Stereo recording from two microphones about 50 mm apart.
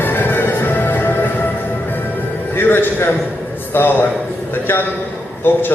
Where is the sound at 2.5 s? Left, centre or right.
Left.